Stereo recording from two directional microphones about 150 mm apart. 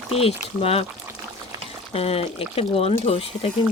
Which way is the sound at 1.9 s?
40° left (ahead or behind).